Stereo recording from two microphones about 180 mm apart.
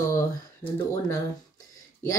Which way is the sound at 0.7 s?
15° left (ahead or behind).